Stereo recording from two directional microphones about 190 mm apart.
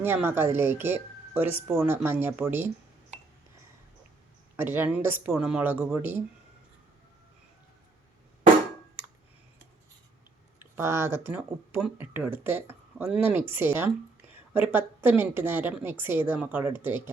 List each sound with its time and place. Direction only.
0.0 s speech: 10° right (ahead or behind)
4.5 s speech: 10° right (ahead or behind)
10.6 s speech: 15° right (ahead or behind)